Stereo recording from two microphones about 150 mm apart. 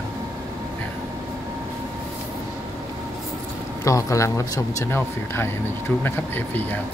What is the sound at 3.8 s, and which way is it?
Speech, 20° left (ahead or behind).